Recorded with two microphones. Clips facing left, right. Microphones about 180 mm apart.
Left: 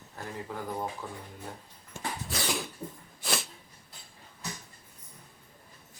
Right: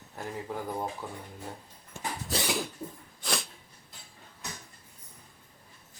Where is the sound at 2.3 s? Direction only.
35° right (ahead or behind).